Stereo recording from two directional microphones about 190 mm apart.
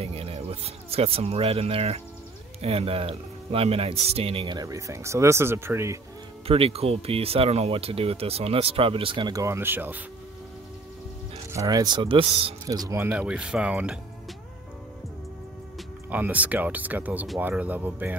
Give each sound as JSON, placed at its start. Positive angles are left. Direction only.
{"t": 0.0, "sound": "a sound", "side_deg": -30}
{"t": 2.6, "sound": "speech", "side_deg": -30}
{"t": 6.4, "sound": "speech", "side_deg": -30}
{"t": 11.5, "sound": "speech", "side_deg": -20}
{"t": 12.6, "sound": "speech", "side_deg": -20}
{"t": 16.1, "sound": "speech", "side_deg": -10}